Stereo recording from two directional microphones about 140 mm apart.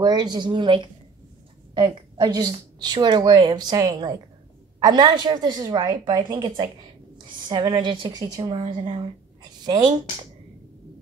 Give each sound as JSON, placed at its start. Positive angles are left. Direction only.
{"t": 0.0, "sound": "a woman's voice", "side_deg": -30}